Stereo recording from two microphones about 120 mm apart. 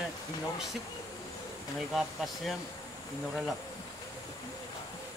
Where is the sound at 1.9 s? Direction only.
Centre (ahead or behind).